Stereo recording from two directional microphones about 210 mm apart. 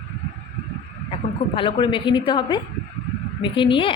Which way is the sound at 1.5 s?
25° left (ahead or behind).